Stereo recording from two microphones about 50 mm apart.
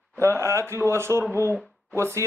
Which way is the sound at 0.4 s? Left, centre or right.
Right.